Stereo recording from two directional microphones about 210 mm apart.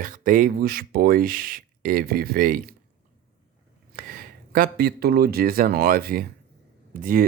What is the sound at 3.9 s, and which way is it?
Speech, 45° right (ahead or behind).